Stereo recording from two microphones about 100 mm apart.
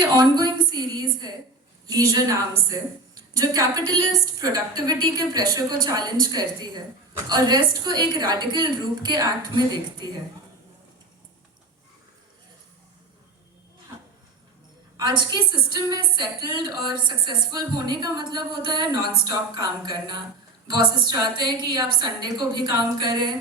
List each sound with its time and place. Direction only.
0.0 s a woman's voice: 45° right (ahead or behind)
14.9 s a woman's voice: 50° right (ahead or behind)